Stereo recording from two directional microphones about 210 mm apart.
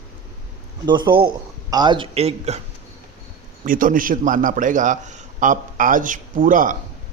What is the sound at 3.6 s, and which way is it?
A man's voice, 40° right (ahead or behind).